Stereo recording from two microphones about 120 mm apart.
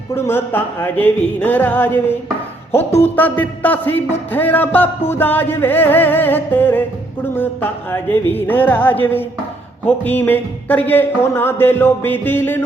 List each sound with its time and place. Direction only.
0.1 s music: 20° left (ahead or behind)